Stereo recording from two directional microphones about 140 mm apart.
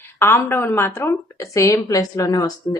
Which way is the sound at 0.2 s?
15° left (ahead or behind).